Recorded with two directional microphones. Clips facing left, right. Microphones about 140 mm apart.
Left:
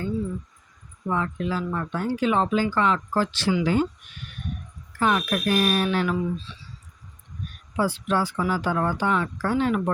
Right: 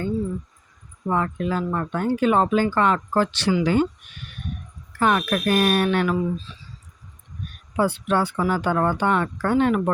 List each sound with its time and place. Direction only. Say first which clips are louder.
1.0 s speech: right 3 dB; 50° right (ahead or behind); by 3.8 s 70° right (ahead or behind)
4.9 s speech: right 2 dB; 60° right (ahead or behind)
6.1 s speech: right 3 dB; 45° right (ahead or behind)
7.8 s speech: right 3 dB; 60° right (ahead or behind)